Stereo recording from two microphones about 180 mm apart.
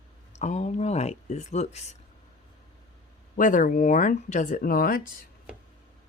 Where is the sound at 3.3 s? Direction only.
45° left (ahead or behind).